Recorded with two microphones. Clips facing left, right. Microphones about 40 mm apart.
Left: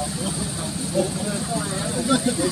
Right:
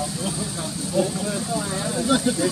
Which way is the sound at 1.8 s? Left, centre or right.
Centre.